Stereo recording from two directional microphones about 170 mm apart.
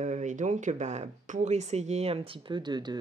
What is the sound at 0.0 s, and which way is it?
Speech, 45° right (ahead or behind).